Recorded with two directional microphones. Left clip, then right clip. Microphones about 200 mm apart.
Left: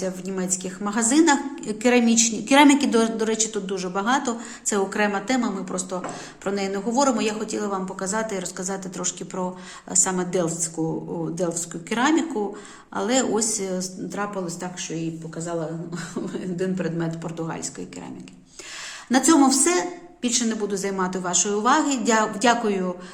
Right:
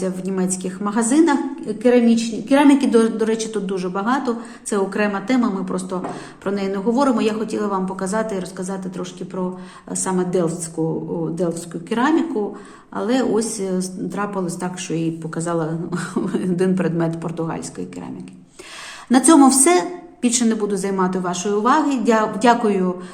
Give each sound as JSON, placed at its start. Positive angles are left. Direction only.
{"t": 0.0, "sound": "a woman's voice", "side_deg": 0}
{"t": 2.7, "sound": "a woman's voice", "side_deg": 10}
{"t": 14.8, "sound": "speech", "side_deg": -25}
{"t": 19.1, "sound": "a woman's voice", "side_deg": -5}